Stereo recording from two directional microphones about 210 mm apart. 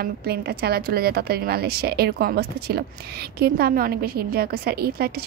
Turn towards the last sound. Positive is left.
turn(degrees=-45)  # may be behind; listen again after turning